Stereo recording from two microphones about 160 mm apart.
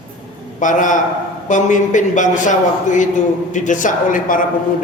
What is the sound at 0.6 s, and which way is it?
A man's voice, 50° left (ahead or behind).